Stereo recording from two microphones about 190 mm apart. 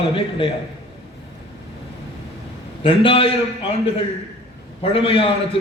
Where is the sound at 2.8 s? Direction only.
30° left (ahead or behind).